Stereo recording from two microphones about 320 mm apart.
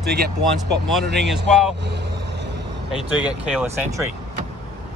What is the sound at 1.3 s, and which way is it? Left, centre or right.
Speech, centre.